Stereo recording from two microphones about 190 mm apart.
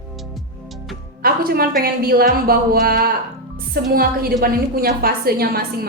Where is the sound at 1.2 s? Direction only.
50° right (ahead or behind).